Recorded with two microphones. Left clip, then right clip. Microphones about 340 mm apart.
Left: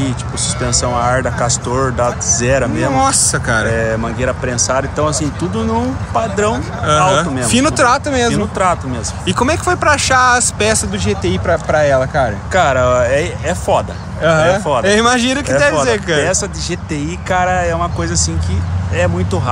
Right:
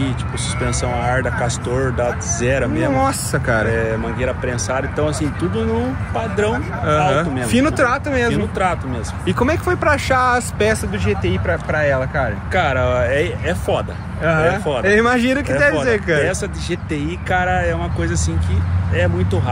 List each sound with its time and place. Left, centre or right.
0.6 s speech: left
2.9 s speech: centre
3.7 s speech: left
6.8 s speech: centre
8.6 s speech: left
9.2 s speech: centre
12.5 s speech: left
14.2 s speech: centre
16.2 s speech: left